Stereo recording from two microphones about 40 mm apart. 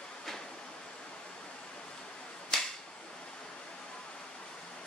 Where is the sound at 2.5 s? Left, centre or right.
Centre.